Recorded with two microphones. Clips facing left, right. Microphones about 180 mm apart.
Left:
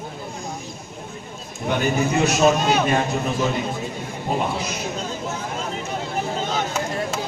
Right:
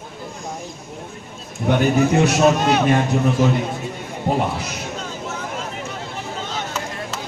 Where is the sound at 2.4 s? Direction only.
65° right (ahead or behind).